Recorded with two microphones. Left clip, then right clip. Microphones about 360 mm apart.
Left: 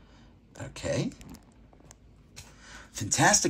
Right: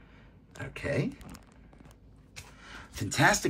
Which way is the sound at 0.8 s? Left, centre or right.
Centre.